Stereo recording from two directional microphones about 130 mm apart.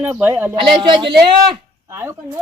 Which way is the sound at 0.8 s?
35° right (ahead or behind).